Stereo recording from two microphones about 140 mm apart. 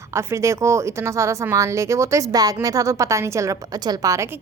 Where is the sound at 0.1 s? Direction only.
20° right (ahead or behind).